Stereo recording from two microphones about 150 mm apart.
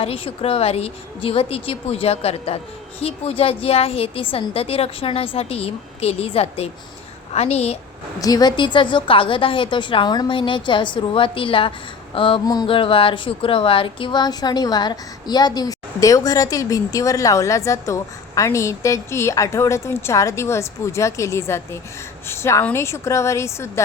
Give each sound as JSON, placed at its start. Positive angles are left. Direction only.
{"t": 0.0, "sound": "a woman's voice", "side_deg": 40}
{"t": 8.2, "sound": "a woman's voice", "side_deg": 25}